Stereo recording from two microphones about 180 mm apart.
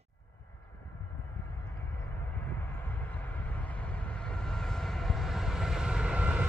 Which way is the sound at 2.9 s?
10° left (ahead or behind).